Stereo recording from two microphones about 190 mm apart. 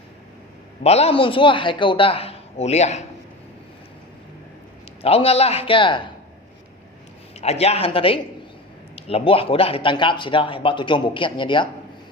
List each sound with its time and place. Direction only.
0.9 s a man's voice: 30° left (ahead or behind)
5.0 s a man's voice: 30° left (ahead or behind)
7.3 s a man's voice: 35° left (ahead or behind)